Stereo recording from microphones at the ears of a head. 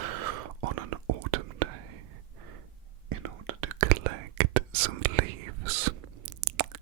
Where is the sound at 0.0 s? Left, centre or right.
Right.